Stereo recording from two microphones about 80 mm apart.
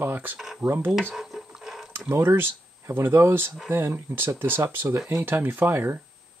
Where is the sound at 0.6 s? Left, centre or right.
Right.